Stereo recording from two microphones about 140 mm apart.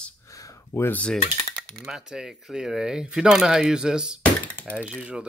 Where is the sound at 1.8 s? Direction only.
5° right (ahead or behind).